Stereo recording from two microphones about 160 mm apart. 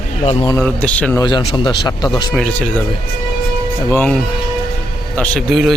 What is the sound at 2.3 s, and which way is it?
Speech, 5° left (ahead or behind).